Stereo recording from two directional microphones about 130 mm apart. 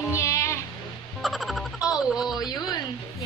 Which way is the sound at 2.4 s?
30° left (ahead or behind).